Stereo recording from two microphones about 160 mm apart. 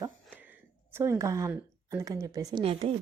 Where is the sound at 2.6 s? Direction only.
35° right (ahead or behind).